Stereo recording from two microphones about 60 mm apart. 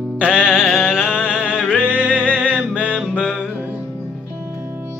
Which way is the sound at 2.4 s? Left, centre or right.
Centre.